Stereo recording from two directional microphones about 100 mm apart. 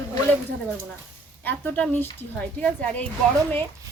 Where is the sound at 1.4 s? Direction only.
15° left (ahead or behind).